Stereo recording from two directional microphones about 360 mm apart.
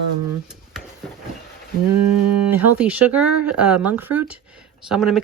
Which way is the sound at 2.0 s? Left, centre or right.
Right.